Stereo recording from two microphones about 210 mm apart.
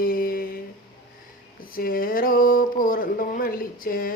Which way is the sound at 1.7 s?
45° left (ahead or behind).